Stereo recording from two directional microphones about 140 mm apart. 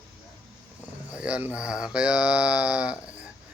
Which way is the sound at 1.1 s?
10° right (ahead or behind).